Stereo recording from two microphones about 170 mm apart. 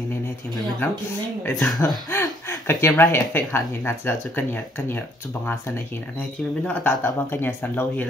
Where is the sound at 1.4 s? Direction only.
10° left (ahead or behind).